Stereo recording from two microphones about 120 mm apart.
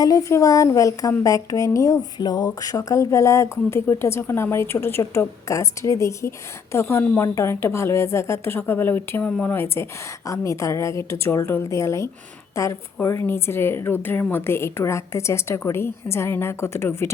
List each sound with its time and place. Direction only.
0.0 s speech: 30° left (ahead or behind)